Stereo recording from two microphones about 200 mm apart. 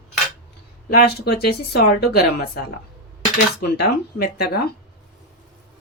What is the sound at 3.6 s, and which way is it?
Speech, 50° left (ahead or behind).